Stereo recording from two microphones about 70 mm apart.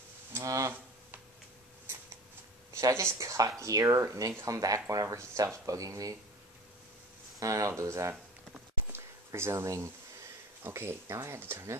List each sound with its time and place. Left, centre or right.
0.3 s speech: right
2.8 s speech: right
7.3 s speech: right
8.9 s a sound: right
10.6 s speech: right